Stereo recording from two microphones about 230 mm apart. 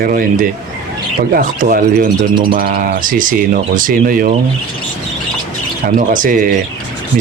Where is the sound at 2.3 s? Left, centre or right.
Right.